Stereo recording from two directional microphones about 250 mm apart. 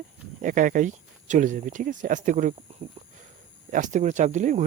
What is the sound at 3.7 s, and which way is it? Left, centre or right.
Speech, right.